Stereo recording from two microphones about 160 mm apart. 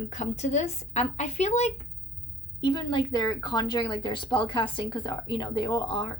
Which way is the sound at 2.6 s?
25° left (ahead or behind).